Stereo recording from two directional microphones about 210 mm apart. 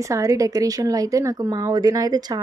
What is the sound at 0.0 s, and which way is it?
Speech, 15° right (ahead or behind).